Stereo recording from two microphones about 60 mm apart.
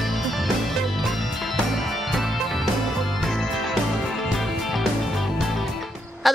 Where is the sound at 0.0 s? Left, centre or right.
Centre.